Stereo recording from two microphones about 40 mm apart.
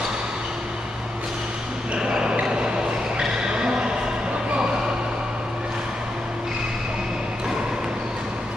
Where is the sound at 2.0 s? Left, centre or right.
Right.